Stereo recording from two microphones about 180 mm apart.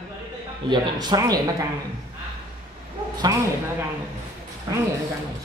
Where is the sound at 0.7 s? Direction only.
25° right (ahead or behind).